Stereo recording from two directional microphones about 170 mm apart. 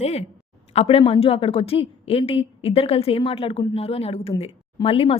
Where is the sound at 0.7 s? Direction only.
35° left (ahead or behind).